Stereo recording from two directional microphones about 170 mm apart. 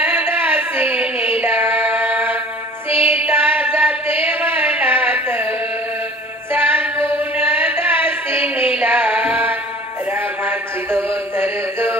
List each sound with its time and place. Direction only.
0.0 s a sound: 10° right (ahead or behind)
2.9 s music: 35° left (ahead or behind)
3.3 s music: 10° right (ahead or behind)
6.5 s music: 10° right (ahead or behind)
10.1 s a sound: 10° right (ahead or behind)
11.3 s mantra: 10° right (ahead or behind)